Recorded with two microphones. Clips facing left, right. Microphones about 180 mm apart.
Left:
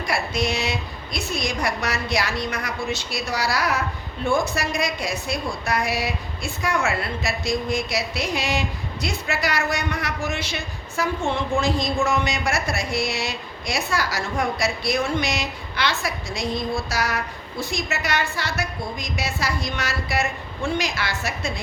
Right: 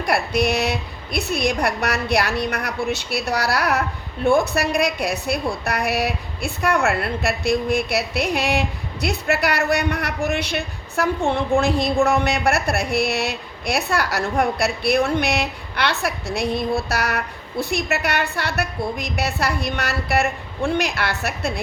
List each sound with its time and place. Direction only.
0.0 s a woman's voice: 65° right (ahead or behind)